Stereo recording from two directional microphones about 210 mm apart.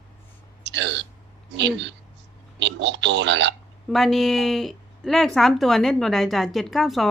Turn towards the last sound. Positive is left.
turn(degrees=0)  # may be behind; listen again after turning